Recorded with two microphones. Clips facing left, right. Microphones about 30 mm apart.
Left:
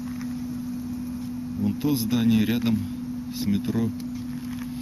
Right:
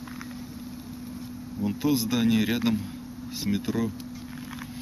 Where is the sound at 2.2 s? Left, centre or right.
Centre.